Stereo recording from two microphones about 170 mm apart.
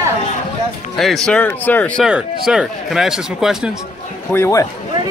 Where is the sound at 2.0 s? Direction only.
5° right (ahead or behind).